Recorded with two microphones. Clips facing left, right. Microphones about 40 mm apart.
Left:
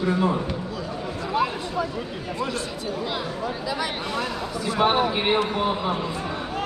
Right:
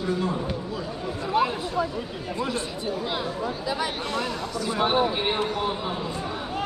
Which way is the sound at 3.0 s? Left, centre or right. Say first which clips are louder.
Even; centre.